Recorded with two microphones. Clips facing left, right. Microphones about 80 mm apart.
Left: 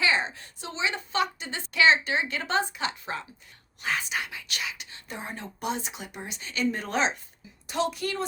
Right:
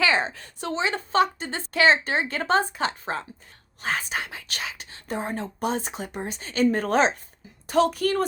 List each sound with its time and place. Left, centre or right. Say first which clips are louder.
0.0 s a woman's voice: right 3 dB; right